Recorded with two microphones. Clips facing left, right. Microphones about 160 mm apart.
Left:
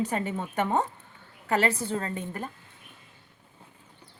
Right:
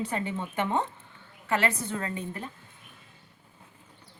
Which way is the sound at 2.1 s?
45° left (ahead or behind).